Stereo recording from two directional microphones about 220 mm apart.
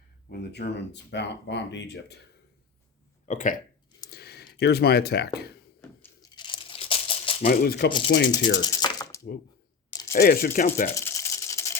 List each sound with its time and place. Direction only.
0.3 s speech: 50° left (ahead or behind)
3.2 s speech: 35° left (ahead or behind)
4.1 s clicking: 45° left (ahead or behind)
6.0 s crumpling: 20° left (ahead or behind)
7.4 s speech: 40° left (ahead or behind)
8.5 s a sound: 20° left (ahead or behind)
10.1 s speech: 40° left (ahead or behind)
10.9 s rattle: 15° left (ahead or behind)